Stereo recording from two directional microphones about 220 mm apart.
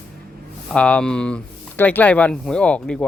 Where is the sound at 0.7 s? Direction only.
5° left (ahead or behind).